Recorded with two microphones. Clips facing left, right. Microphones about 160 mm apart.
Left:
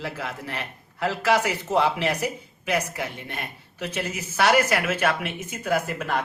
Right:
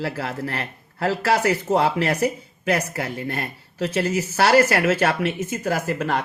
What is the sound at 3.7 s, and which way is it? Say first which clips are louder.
Speech: right 8 dB; 35° right (ahead or behind).